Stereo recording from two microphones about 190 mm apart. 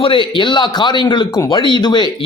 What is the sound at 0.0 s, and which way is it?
A man's voice, 25° left (ahead or behind).